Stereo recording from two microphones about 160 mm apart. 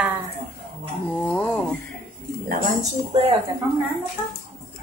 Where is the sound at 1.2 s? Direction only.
10° left (ahead or behind).